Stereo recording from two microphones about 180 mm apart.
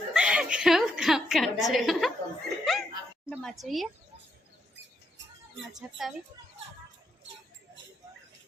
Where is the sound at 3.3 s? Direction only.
Centre (ahead or behind).